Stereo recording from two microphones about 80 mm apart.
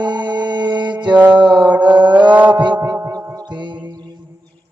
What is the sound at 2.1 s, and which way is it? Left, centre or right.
Mantra, centre.